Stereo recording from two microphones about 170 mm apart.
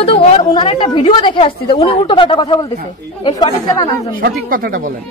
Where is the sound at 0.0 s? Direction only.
35° left (ahead or behind).